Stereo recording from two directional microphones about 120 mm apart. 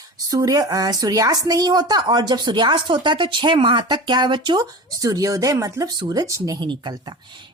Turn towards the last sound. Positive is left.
turn(degrees=-40)  # may be behind; listen again after turning